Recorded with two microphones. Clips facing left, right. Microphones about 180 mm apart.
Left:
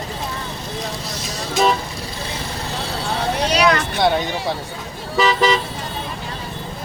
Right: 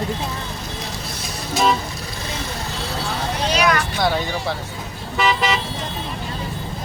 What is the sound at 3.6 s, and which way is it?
Speech, 20° left (ahead or behind).